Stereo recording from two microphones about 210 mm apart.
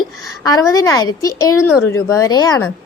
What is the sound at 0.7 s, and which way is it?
A woman's voice, 15° left (ahead or behind).